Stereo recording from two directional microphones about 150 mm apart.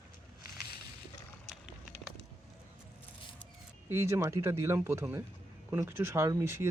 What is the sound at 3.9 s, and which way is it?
Speech, 20° right (ahead or behind).